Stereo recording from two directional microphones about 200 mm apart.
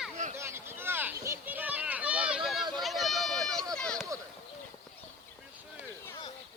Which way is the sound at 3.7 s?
5° left (ahead or behind).